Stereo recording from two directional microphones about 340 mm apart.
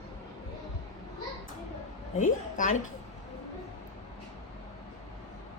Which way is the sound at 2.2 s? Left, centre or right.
Left.